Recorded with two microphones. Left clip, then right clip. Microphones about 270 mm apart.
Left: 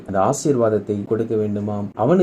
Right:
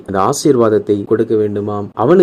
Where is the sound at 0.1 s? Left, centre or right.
Right.